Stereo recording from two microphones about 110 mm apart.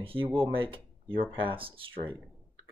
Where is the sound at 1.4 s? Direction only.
55° right (ahead or behind).